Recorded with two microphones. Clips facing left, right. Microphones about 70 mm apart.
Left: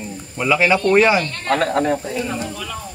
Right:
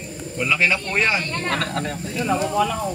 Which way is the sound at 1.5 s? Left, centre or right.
Left.